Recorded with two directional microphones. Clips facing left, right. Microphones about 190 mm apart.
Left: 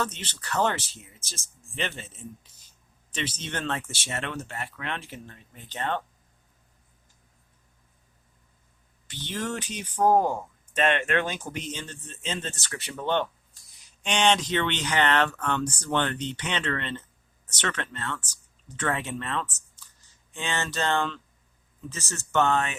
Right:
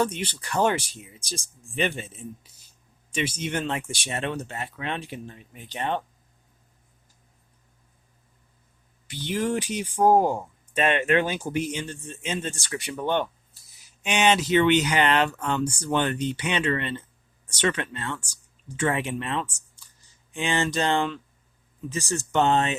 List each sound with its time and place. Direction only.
0.0 s speech: 10° right (ahead or behind)
9.0 s speech: 10° right (ahead or behind)